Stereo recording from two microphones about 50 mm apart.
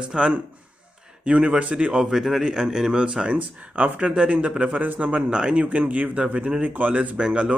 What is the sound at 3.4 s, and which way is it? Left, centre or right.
Speech, right.